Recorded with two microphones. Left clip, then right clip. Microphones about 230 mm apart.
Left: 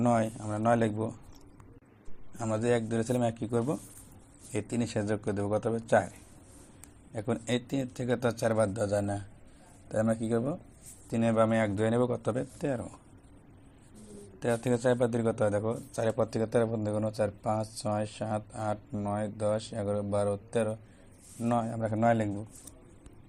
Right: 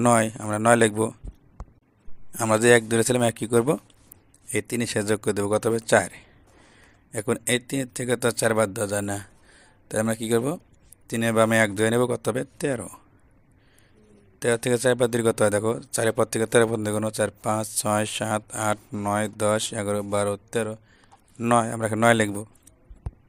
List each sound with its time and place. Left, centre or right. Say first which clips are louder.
0.0 s speech: right 8 dB; right
2.4 s speech: right 11 dB; right
7.1 s speech: right 7 dB; right
8.7 s a man's voice: right 3 dB; right
14.4 s speech: right 6 dB; right
16.4 s speech: right 8 dB; right
17.8 s speech: right 10 dB; right
18.9 s speech: right 8 dB; right